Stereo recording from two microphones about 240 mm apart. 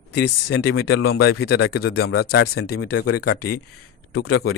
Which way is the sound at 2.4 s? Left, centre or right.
Left.